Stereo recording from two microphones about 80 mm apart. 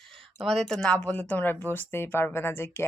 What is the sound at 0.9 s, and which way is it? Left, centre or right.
Speech, left.